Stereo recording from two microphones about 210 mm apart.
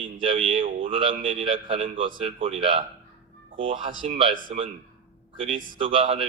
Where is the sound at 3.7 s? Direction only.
40° right (ahead or behind).